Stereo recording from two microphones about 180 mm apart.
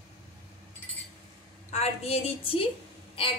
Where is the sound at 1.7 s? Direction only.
35° left (ahead or behind).